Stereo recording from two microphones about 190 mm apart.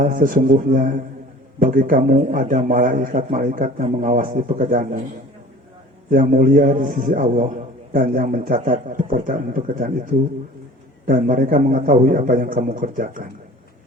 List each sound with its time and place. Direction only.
0.0 s a man's voice: 45° right (ahead or behind)
6.1 s a man's voice: 45° right (ahead or behind)